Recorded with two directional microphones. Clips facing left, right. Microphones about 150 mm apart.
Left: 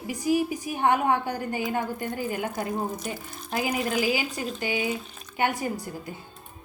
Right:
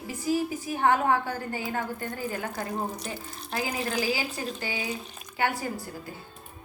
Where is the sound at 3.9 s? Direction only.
15° left (ahead or behind).